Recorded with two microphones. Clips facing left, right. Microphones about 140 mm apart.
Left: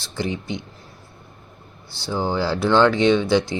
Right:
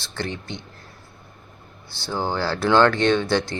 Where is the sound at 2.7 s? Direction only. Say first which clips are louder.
Left 1 dB; centre (ahead or behind).